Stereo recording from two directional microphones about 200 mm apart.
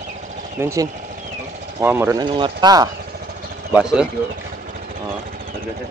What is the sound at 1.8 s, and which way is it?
Speech, 10° right (ahead or behind).